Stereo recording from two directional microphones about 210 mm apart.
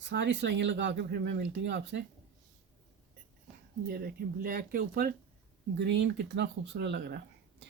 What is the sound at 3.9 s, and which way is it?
Speech, 45° right (ahead or behind).